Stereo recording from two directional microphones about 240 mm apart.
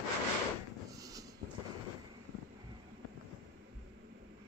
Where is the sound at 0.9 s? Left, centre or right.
Centre.